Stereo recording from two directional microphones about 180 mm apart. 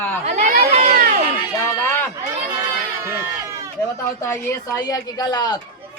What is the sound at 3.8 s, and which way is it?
Speech, 15° left (ahead or behind).